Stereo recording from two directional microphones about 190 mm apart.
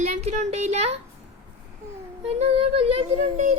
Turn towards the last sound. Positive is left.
turn(degrees=-35)  # may be behind; listen again after turning